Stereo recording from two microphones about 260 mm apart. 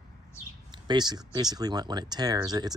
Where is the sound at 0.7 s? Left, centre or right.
Centre.